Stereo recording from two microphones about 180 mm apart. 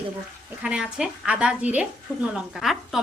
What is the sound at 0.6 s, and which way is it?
A woman's voice, 5° right (ahead or behind).